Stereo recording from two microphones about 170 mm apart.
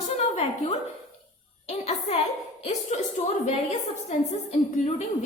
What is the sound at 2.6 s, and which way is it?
Speech, 40° left (ahead or behind).